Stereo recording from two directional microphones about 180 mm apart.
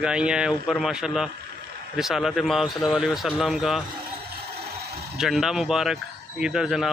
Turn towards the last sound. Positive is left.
turn(degrees=0)  # may be behind; listen again after turning